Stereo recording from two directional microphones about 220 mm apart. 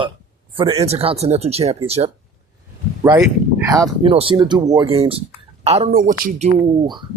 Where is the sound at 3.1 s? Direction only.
15° right (ahead or behind); by 5.9 s 30° right (ahead or behind).